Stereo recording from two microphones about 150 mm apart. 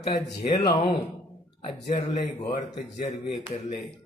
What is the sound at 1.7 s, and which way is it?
A man's voice, 45° left (ahead or behind).